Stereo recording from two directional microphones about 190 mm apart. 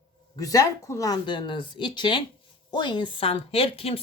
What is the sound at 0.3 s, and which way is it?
A woman's voice, 20° left (ahead or behind).